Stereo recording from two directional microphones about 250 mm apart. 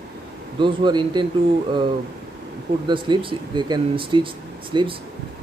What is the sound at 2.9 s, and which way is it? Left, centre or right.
A man's voice, centre.